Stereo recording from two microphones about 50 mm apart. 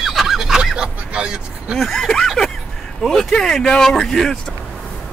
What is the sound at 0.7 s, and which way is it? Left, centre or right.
Vehicle, centre.